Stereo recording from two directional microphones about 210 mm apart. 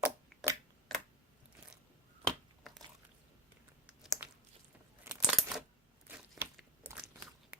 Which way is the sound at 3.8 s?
5° right (ahead or behind).